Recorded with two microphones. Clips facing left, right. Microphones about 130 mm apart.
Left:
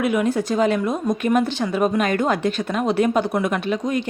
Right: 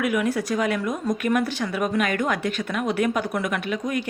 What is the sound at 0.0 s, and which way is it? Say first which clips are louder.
Speech: left 3 dB; 25° left (ahead or behind).